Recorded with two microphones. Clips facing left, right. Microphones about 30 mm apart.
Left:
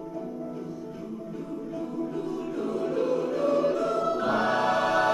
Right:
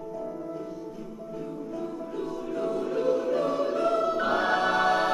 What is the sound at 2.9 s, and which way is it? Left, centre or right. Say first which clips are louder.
Choir: right 1 dB; centre.